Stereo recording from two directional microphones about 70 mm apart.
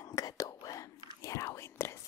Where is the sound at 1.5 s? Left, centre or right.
Left.